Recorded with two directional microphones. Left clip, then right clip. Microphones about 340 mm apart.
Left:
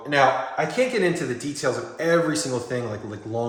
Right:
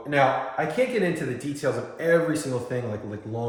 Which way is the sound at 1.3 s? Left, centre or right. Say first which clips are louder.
Left 2 dB; left.